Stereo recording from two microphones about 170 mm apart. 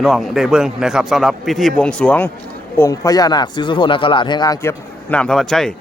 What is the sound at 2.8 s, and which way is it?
Speech, 20° left (ahead or behind).